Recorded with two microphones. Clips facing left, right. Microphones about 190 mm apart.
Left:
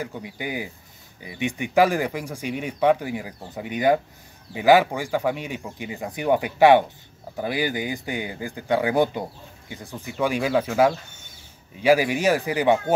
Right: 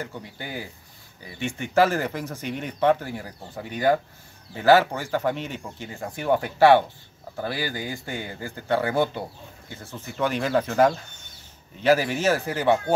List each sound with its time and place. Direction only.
0.0 s speech: 15° left (ahead or behind)